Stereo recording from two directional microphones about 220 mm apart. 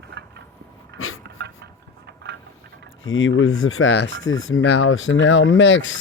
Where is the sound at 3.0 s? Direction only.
60° left (ahead or behind).